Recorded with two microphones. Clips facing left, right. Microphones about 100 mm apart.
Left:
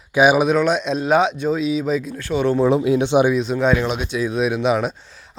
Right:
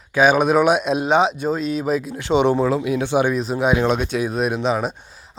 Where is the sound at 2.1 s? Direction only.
20° right (ahead or behind).